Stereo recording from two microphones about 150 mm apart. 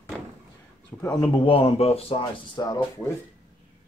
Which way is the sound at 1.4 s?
40° left (ahead or behind).